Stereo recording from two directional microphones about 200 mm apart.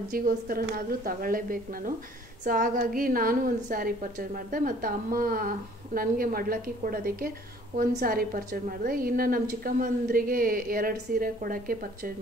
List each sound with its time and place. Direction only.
0.1 s a woman's voice: 50° right (ahead or behind)